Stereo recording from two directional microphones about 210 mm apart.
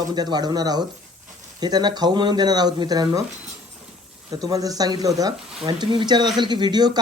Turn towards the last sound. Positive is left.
turn(degrees=-20)  # may be behind; listen again after turning